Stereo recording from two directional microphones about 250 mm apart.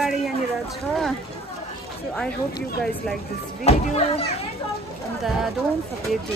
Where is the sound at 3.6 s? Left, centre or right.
Left.